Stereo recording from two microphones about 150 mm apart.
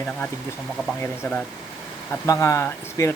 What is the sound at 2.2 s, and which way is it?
Speech, 20° left (ahead or behind).